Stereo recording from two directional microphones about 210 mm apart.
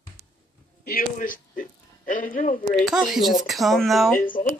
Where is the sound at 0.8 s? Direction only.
45° left (ahead or behind).